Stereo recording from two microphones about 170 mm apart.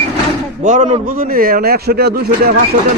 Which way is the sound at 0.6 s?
45° right (ahead or behind).